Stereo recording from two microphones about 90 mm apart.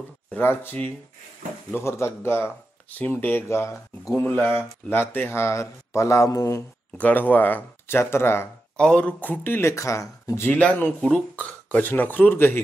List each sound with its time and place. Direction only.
0.3 s speech: 25° left (ahead or behind)
7.0 s speech: 20° left (ahead or behind)
8.7 s speech: 10° left (ahead or behind); by 10.4 s 35° left (ahead or behind)
10.4 s speech: 15° left (ahead or behind)